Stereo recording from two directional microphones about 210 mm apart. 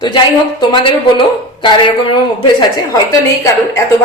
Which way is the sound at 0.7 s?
25° left (ahead or behind).